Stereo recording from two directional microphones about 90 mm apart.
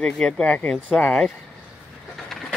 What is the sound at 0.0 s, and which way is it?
Speech, 10° left (ahead or behind).